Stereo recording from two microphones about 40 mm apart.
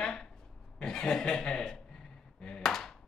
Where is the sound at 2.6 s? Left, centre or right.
Centre.